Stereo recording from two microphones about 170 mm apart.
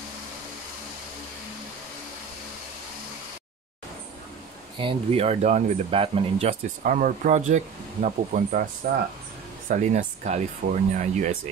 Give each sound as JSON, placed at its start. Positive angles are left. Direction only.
{"t": 4.7, "sound": "speech", "side_deg": -35}
{"t": 6.8, "sound": "speech", "side_deg": -55}
{"t": 9.7, "sound": "speech", "side_deg": -45}